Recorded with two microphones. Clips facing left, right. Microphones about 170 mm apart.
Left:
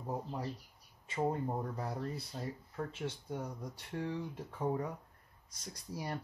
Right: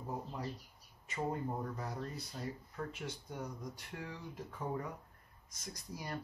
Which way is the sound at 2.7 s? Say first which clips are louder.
Left 3 dB; 30° left (ahead or behind).